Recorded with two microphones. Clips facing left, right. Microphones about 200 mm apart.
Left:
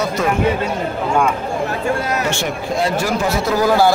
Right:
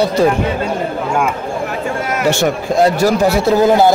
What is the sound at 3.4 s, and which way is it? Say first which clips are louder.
Speech: right 3 dB; 25° right (ahead or behind).